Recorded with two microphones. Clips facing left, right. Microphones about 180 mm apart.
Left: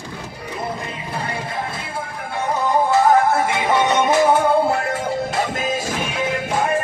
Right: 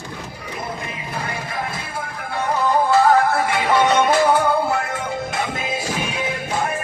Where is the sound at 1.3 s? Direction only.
30° left (ahead or behind).